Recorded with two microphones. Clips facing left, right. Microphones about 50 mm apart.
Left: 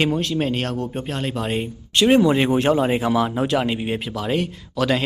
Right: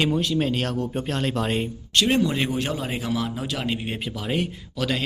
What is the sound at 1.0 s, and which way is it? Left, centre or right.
Speech, centre.